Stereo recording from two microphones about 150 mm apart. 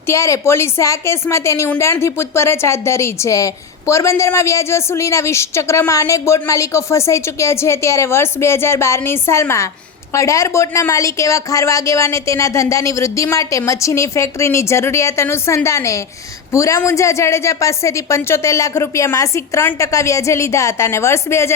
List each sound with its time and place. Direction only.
0.1 s a woman's voice: 20° left (ahead or behind)